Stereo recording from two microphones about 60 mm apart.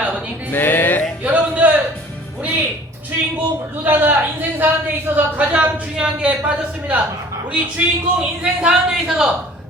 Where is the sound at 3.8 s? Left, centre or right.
Right; by 6.3 s centre.